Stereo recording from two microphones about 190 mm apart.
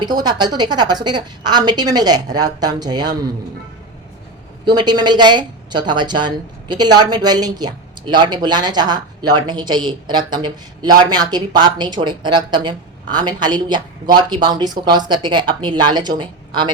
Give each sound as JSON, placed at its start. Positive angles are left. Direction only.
{"t": 0.0, "sound": "a woman's voice", "side_deg": -20}
{"t": 4.6, "sound": "a woman's voice", "side_deg": -20}